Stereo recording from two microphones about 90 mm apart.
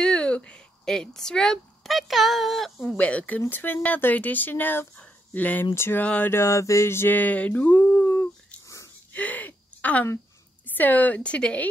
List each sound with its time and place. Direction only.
0.0 s speech: 10° left (ahead or behind)
3.0 s speech: 15° left (ahead or behind)
6.0 s speech: 15° left (ahead or behind)
6.3 s speech: 35° left (ahead or behind)
9.1 s a sound: 20° left (ahead or behind)
10.8 s speech: 20° left (ahead or behind)